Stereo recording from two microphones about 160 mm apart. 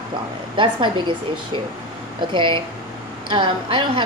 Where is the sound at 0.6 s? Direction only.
30° right (ahead or behind).